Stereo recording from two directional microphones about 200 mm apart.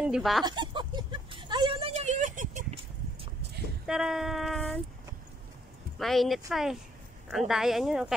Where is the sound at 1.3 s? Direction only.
25° right (ahead or behind); by 2.6 s 40° right (ahead or behind).